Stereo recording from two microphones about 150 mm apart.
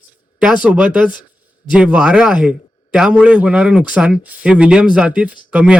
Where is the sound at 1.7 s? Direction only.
5° right (ahead or behind).